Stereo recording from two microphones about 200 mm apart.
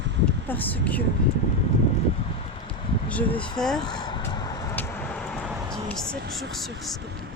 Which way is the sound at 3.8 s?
20° left (ahead or behind).